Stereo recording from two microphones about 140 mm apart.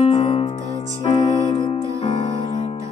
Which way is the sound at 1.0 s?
30° left (ahead or behind).